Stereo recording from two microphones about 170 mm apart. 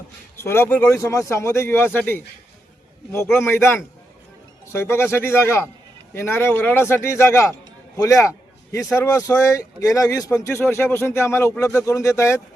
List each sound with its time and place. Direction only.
0.4 s a man's voice: 15° left (ahead or behind)
3.4 s a man's voice: 15° left (ahead or behind)